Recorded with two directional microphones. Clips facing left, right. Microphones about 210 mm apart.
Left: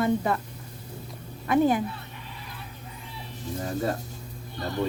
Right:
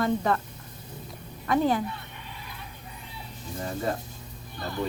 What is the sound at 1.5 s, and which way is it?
Speech, 15° left (ahead or behind).